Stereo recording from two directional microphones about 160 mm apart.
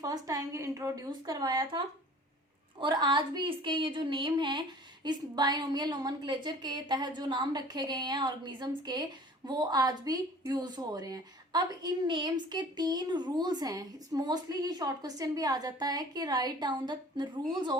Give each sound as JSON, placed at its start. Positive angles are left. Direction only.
{"t": 0.0, "sound": "a woman's voice", "side_deg": -25}
{"t": 2.8, "sound": "a woman's voice", "side_deg": -30}